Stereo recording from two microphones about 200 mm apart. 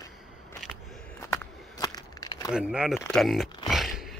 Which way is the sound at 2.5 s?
5° right (ahead or behind).